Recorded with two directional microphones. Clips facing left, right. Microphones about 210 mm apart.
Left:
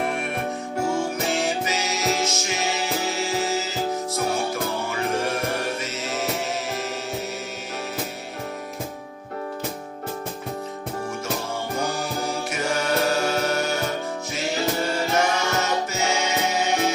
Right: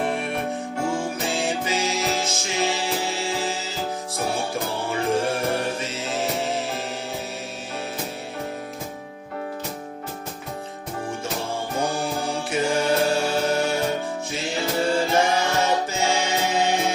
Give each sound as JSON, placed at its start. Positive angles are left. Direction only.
{"t": 0.9, "sound": "music", "side_deg": -30}
{"t": 11.8, "sound": "music", "side_deg": -30}